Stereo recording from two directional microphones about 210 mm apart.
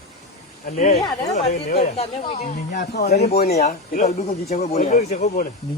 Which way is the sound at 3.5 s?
35° left (ahead or behind).